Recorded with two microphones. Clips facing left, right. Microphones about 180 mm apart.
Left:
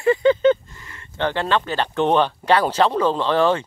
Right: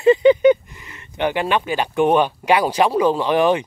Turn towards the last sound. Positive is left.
turn(degrees=-15)  # may be behind; listen again after turning